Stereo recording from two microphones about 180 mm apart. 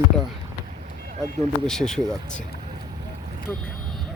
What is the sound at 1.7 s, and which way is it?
Speech, 5° left (ahead or behind).